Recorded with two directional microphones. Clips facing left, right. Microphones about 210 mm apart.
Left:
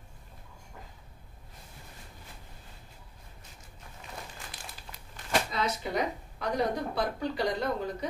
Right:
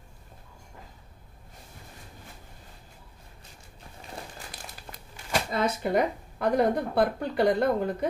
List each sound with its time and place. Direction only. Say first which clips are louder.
5.5 s speech: right 6 dB; 55° right (ahead or behind)